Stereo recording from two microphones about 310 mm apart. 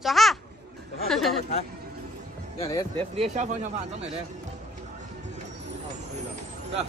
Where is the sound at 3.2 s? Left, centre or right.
Right.